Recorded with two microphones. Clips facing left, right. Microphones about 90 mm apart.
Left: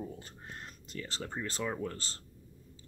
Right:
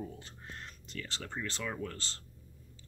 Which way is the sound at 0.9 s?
20° left (ahead or behind).